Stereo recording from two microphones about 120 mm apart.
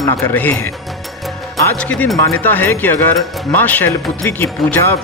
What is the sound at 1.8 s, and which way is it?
Speech, 10° left (ahead or behind).